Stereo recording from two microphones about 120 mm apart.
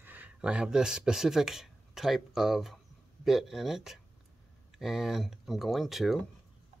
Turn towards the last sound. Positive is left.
turn(degrees=0)  # may be behind; listen again after turning